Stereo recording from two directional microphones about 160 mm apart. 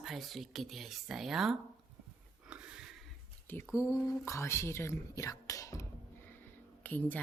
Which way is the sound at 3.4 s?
15° left (ahead or behind).